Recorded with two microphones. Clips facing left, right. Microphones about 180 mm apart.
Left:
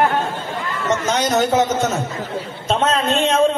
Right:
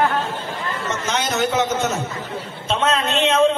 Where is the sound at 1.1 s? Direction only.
40° left (ahead or behind).